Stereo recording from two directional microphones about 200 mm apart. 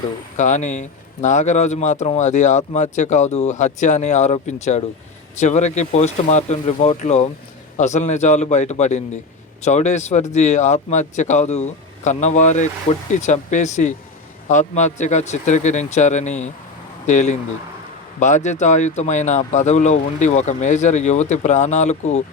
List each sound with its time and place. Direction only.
0.3 s speech: 35° left (ahead or behind)